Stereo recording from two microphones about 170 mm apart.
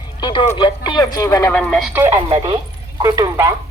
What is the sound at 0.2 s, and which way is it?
Speech, 30° left (ahead or behind).